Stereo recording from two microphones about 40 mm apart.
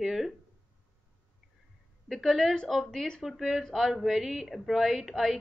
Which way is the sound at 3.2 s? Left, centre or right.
Centre.